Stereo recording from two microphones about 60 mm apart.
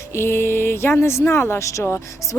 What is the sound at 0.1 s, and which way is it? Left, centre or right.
Speech, left.